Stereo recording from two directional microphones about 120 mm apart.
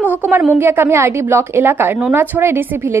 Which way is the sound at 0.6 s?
20° right (ahead or behind).